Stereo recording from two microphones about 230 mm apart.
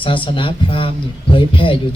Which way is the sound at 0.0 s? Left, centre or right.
Left.